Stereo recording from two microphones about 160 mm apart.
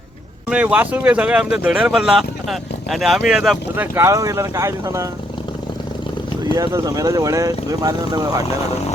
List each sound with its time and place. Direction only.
0.5 s speech: 10° right (ahead or behind)
3.8 s speech: 15° right (ahead or behind)
6.4 s speech: 25° right (ahead or behind)